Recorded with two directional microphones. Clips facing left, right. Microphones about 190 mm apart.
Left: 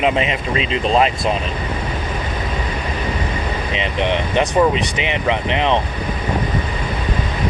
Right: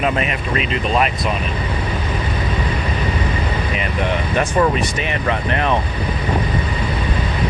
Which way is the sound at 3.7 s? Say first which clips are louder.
Left 4 dB; 20° left (ahead or behind).